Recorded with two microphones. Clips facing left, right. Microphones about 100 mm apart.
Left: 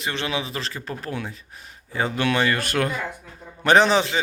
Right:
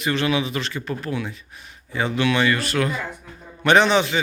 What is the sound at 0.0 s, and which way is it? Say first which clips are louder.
Speech: right 5 dB; 25° left (ahead or behind).